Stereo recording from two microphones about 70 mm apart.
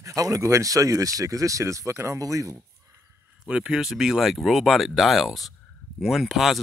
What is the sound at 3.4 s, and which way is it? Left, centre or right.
Speech, centre.